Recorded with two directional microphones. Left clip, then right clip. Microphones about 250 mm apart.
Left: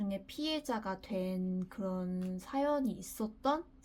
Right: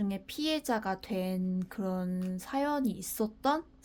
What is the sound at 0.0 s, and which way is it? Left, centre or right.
Speech, right.